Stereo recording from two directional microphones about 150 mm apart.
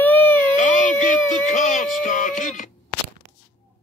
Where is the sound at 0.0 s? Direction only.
15° left (ahead or behind).